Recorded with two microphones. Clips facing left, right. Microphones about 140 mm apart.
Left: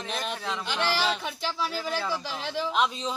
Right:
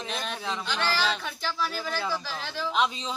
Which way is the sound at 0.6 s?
15° left (ahead or behind).